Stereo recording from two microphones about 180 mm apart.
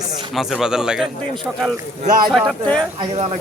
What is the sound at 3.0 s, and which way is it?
Speech, 30° right (ahead or behind).